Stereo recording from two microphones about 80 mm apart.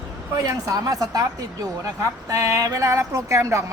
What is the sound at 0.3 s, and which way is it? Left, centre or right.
A woman's voice, right.